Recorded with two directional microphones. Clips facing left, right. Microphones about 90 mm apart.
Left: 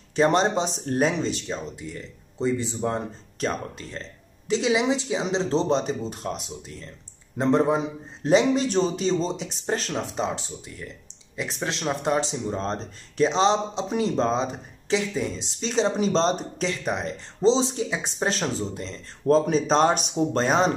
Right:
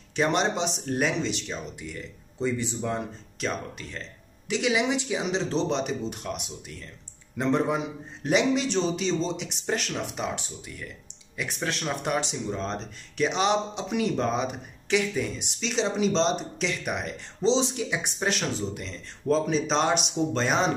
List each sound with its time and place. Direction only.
0.1 s speech: 35° left (ahead or behind)
19.2 s speech: 45° left (ahead or behind)